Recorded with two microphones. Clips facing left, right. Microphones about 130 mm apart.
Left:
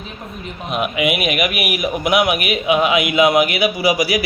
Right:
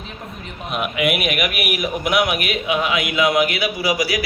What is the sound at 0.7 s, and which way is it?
A man's voice, centre (ahead or behind).